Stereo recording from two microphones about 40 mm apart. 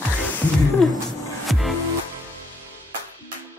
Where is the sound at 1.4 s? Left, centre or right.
Centre.